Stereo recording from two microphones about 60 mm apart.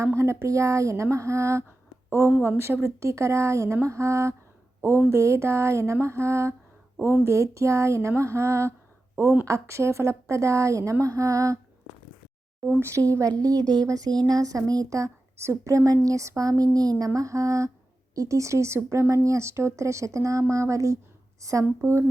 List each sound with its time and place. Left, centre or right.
0.2 s a woman's voice: right
4.8 s a woman's voice: right
5.1 s a sound: right
9.5 s speech: right
12.6 s speech: right
16.7 s speech: right
17.2 s speech: right
21.6 s a sound: right